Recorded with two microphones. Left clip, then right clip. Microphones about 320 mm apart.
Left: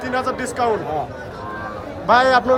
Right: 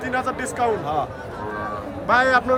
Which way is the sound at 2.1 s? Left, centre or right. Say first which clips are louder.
Left 3 dB; centre.